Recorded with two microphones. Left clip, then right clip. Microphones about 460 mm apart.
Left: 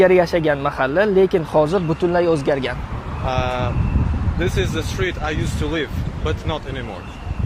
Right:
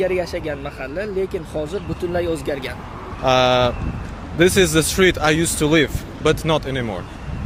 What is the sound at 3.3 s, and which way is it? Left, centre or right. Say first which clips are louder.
Speech: right 7 dB; right.